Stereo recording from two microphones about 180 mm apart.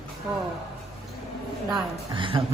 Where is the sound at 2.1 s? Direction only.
30° right (ahead or behind).